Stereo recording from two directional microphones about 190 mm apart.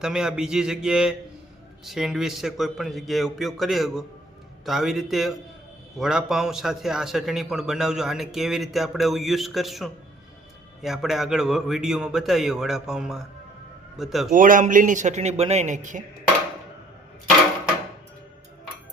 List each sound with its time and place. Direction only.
0.0 s a man's voice: 5° right (ahead or behind)
14.3 s a man's voice: 45° right (ahead or behind)